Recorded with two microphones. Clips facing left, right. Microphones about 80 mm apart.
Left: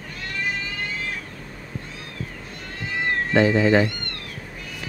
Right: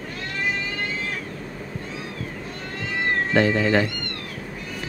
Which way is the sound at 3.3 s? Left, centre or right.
Centre.